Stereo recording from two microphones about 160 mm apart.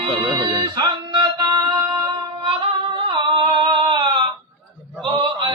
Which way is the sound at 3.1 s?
30° right (ahead or behind).